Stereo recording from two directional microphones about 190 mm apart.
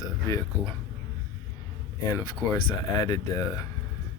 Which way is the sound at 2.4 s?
15° left (ahead or behind).